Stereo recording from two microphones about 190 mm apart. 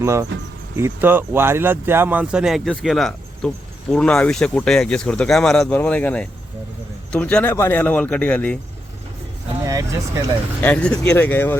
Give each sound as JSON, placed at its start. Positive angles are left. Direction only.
{"t": 0.0, "sound": "speech", "side_deg": -15}
{"t": 9.6, "sound": "speech", "side_deg": -15}
{"t": 10.6, "sound": "speech", "side_deg": 5}